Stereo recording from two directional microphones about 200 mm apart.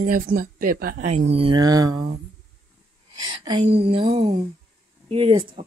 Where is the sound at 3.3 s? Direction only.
25° right (ahead or behind).